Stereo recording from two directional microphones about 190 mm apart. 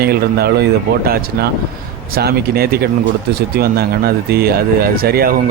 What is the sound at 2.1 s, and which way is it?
Speech, 55° right (ahead or behind).